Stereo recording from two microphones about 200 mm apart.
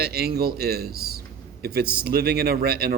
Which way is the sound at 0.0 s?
50° right (ahead or behind).